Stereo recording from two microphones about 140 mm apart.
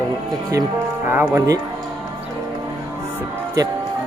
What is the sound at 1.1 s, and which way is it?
Speech, 15° right (ahead or behind).